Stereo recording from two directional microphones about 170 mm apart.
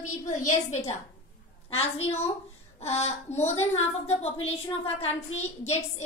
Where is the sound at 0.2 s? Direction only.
45° left (ahead or behind).